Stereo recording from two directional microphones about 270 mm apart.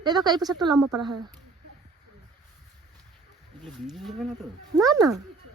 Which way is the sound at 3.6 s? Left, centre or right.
Centre.